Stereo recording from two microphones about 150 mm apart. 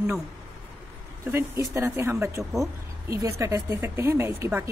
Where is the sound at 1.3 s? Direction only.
20° right (ahead or behind).